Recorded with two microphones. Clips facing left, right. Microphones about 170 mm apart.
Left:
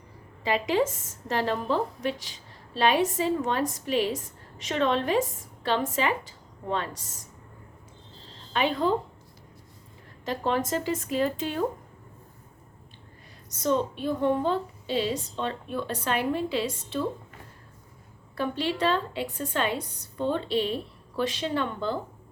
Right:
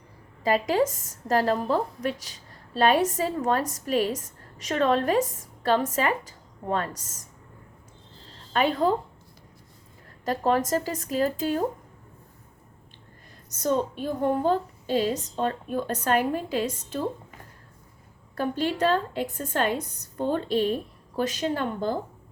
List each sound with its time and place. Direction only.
0.4 s a woman's voice: 40° right (ahead or behind)
8.5 s a woman's voice: 40° right (ahead or behind)
10.2 s a woman's voice: 40° right (ahead or behind)
13.6 s a woman's voice: 45° right (ahead or behind)
18.3 s a woman's voice: 45° right (ahead or behind)